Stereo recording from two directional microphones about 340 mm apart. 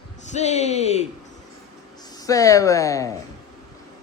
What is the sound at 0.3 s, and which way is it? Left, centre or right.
Speech, centre.